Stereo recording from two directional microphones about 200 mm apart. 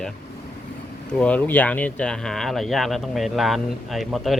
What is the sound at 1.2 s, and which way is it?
Speech, 5° left (ahead or behind).